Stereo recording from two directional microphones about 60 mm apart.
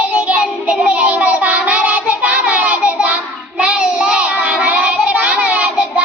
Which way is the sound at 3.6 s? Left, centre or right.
Centre.